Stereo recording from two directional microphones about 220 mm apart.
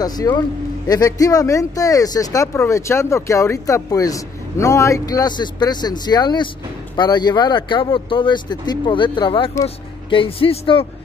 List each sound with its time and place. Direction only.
0.0 s speech: 15° left (ahead or behind)